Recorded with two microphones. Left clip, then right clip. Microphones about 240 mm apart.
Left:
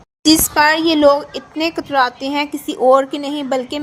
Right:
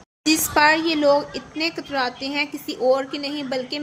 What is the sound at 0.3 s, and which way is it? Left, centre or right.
A woman's voice, centre.